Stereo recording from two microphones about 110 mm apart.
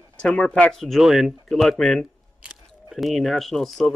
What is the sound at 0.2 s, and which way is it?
Speech, 10° left (ahead or behind).